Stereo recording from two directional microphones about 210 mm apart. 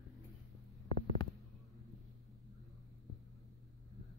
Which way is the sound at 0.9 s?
25° left (ahead or behind).